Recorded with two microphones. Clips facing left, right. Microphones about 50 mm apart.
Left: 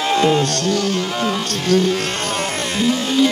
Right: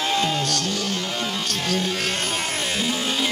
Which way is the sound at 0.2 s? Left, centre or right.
Left.